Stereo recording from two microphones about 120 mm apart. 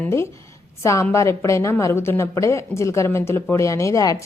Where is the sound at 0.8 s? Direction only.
25° left (ahead or behind).